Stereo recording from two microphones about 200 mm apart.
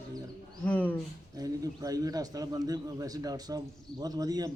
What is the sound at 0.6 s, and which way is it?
Speech, 10° left (ahead or behind).